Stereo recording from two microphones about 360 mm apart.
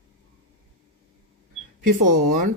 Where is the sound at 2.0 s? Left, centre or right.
Right.